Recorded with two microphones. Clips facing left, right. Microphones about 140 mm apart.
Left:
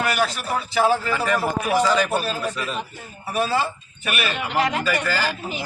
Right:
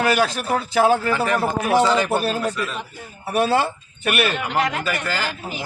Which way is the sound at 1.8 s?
20° right (ahead or behind).